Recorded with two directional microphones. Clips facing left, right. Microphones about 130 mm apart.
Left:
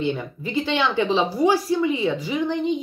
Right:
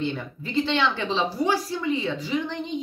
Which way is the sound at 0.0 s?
10° left (ahead or behind).